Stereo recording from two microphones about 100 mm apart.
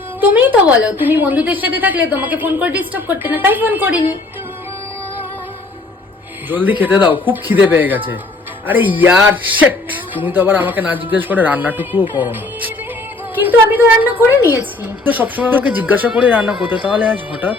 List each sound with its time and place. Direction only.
0.2 s a woman's voice: 15° right (ahead or behind)
6.5 s a woman's voice: 15° right (ahead or behind)
13.3 s a woman's voice: 20° right (ahead or behind)